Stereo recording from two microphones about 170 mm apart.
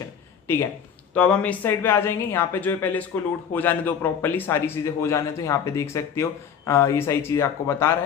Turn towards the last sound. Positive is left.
turn(degrees=15)  # may be behind; listen again after turning